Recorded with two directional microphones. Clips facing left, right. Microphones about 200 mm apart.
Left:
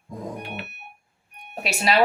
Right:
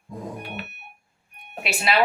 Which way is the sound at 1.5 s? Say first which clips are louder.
Left 1 dB; 40° left (ahead or behind).